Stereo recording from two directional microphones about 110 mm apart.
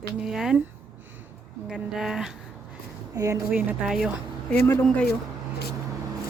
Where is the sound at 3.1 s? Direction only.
30° right (ahead or behind).